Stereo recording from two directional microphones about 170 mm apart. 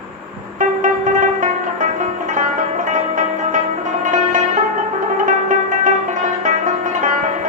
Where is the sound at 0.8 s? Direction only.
50° right (ahead or behind).